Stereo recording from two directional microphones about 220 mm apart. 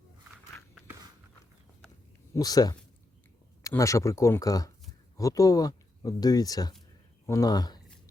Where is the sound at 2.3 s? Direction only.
15° left (ahead or behind).